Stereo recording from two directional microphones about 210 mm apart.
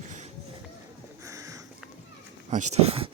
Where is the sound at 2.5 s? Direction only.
35° right (ahead or behind).